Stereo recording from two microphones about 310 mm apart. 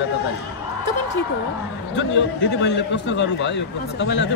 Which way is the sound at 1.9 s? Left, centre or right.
Left.